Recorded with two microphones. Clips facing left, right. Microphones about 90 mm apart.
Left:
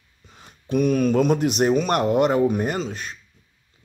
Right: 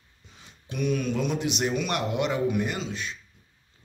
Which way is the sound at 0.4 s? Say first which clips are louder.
Left 9 dB; 45° left (ahead or behind).